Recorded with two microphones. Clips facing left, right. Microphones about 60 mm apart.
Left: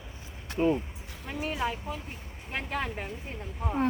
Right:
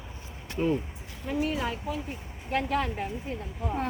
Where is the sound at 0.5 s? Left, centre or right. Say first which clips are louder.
Left 1 dB; centre.